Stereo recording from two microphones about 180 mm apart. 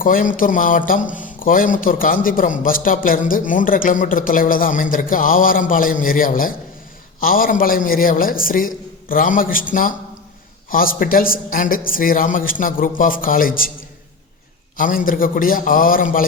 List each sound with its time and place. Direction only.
0.0 s a man's voice: 50° left (ahead or behind)
14.8 s a man's voice: 50° left (ahead or behind)